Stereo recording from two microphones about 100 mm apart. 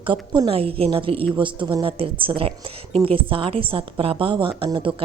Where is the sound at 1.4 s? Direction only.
55° right (ahead or behind).